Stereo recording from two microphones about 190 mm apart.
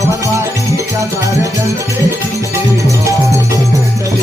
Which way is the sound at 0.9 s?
15° right (ahead or behind).